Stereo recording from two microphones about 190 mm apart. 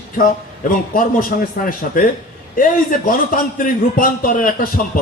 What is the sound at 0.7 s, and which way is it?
A man's voice, 45° left (ahead or behind).